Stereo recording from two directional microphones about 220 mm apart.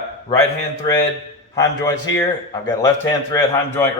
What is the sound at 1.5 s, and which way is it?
A man's voice, 15° left (ahead or behind).